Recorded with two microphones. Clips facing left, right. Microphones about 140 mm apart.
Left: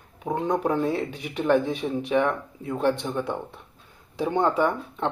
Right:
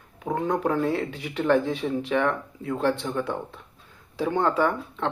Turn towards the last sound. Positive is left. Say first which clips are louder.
# even
turn(degrees=15)  # may be behind; listen again after turning